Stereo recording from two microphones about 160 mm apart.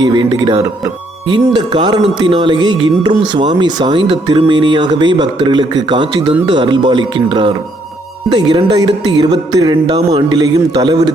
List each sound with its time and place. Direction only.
0.1 s speech: 30° right (ahead or behind)